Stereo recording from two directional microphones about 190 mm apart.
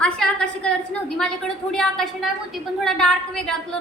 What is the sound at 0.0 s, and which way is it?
A woman's voice, 5° left (ahead or behind).